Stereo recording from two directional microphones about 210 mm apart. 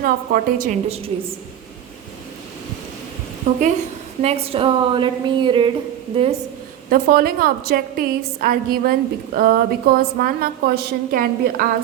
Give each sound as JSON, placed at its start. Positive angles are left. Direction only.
{"t": 0.0, "sound": "a woman's voice", "side_deg": -45}
{"t": 4.2, "sound": "a woman's voice", "side_deg": -30}
{"t": 6.9, "sound": "a woman's voice", "side_deg": -45}